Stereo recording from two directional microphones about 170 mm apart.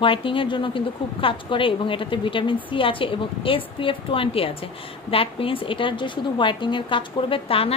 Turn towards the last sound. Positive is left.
turn(degrees=35)  # may be behind; listen again after turning